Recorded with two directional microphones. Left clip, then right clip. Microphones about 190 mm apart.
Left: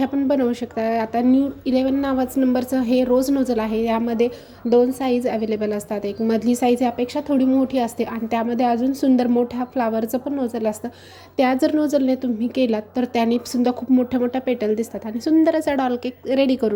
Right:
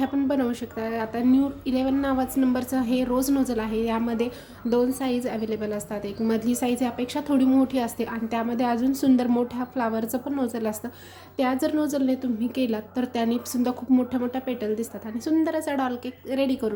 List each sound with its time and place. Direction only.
0.0 s a woman's voice: 25° left (ahead or behind)